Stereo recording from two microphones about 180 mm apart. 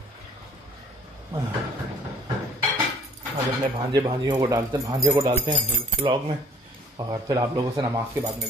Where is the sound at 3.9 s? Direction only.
20° right (ahead or behind).